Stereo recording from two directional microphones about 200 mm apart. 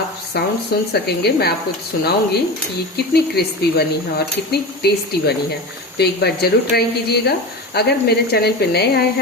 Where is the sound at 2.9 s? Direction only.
50° left (ahead or behind).